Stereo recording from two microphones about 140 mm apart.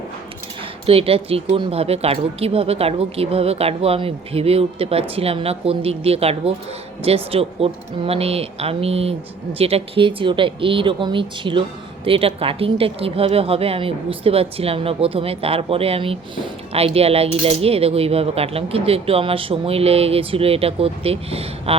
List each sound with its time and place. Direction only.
0.9 s a woman's voice: 45° right (ahead or behind)